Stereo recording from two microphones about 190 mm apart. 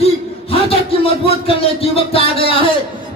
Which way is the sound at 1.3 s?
30° left (ahead or behind).